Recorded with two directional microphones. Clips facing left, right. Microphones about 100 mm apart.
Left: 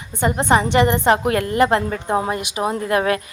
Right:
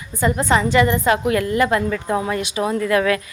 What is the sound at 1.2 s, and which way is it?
A woman's voice, 40° left (ahead or behind).